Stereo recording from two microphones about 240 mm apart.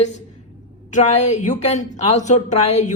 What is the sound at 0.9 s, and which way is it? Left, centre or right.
A woman's voice, left.